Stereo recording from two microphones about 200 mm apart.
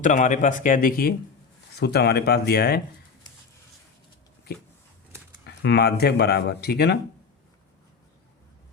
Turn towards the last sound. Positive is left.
turn(degrees=55)  # may be behind; listen again after turning